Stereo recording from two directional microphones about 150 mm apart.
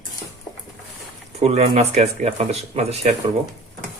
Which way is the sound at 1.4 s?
45° right (ahead or behind).